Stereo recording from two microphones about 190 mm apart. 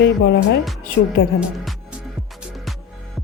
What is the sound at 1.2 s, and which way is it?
Speech, 90° left.